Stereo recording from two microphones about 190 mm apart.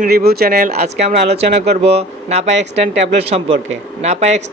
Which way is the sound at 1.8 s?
35° right (ahead or behind).